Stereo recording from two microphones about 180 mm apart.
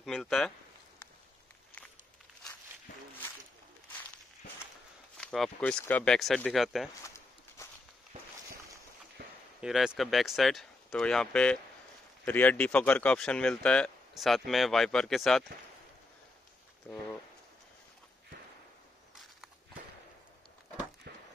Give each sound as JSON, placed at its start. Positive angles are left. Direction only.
{"t": 0.0, "sound": "speech", "side_deg": 0}
{"t": 5.1, "sound": "speech", "side_deg": 5}
{"t": 9.2, "sound": "a sound", "side_deg": -60}
{"t": 9.6, "sound": "speech", "side_deg": -5}